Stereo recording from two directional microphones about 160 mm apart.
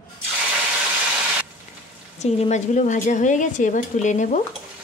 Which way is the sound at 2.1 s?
40° left (ahead or behind).